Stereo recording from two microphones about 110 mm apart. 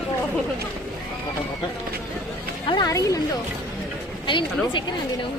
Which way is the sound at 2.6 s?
50° left (ahead or behind).